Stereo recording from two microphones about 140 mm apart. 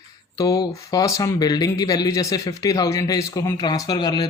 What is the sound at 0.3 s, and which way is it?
Speech, 25° left (ahead or behind).